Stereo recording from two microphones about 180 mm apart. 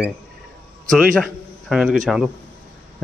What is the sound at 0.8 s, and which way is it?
A man's voice, centre (ahead or behind).